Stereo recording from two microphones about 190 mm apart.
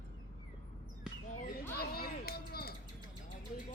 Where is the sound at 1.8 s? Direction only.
55° left (ahead or behind).